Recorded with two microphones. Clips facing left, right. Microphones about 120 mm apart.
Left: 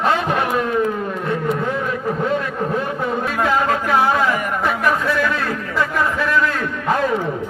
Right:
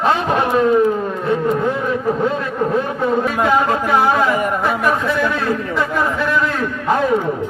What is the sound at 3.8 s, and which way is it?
Speech, 15° right (ahead or behind).